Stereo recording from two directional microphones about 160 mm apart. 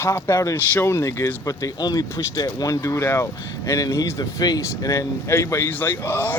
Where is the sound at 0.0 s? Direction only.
20° left (ahead or behind).